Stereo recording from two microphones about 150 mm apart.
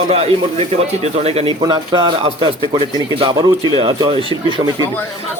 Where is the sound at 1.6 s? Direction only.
30° right (ahead or behind).